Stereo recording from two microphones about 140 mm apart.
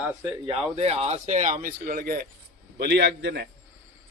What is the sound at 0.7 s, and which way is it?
Speech, 45° right (ahead or behind).